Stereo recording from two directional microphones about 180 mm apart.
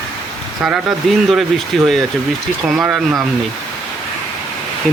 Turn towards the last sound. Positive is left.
turn(degrees=0)  # may be behind; listen again after turning